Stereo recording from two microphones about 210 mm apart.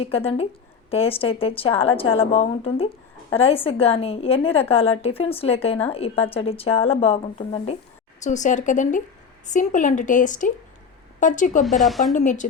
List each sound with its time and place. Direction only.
0.9 s a woman's voice: 25° left (ahead or behind)
11.6 s a woman's voice: centre (ahead or behind)
12.1 s speech: 35° left (ahead or behind)